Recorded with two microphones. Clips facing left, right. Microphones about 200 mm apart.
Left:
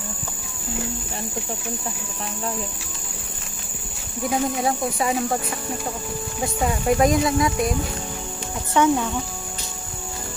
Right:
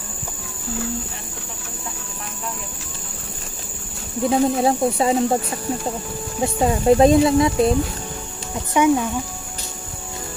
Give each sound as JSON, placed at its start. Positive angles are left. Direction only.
{"t": 4.2, "sound": "speech", "side_deg": -25}
{"t": 6.4, "sound": "speech", "side_deg": -30}
{"t": 8.7, "sound": "speech", "side_deg": -15}